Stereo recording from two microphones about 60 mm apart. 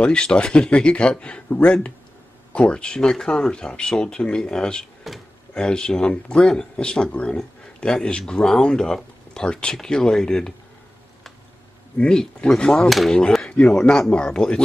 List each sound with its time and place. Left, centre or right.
0.0 s speech: centre
5.1 s speech: centre
5.5 s speech: centre
12.0 s speech: centre